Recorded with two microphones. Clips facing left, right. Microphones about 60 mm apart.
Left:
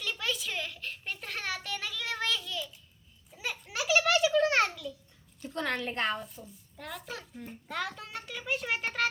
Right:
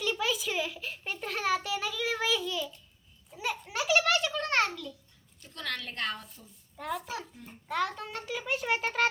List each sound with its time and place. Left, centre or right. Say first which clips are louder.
0.0 s a sound: right 4 dB; centre
5.4 s a woman's voice: left 5 dB; left
6.2 s a child's voice: left 6 dB; centre